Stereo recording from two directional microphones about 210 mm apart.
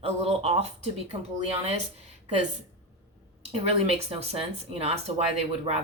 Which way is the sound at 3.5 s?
30° right (ahead or behind).